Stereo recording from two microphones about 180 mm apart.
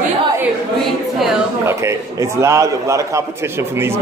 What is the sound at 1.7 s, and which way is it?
A man's voice, 15° right (ahead or behind).